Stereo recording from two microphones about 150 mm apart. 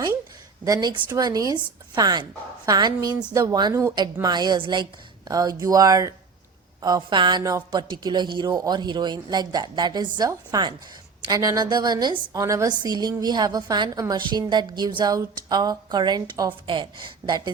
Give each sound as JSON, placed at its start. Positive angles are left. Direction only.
{"t": 0.6, "sound": "a woman's voice", "side_deg": -25}